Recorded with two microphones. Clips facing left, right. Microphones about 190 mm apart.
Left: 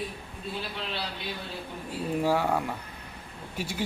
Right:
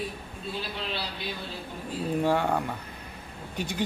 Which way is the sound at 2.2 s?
5° left (ahead or behind).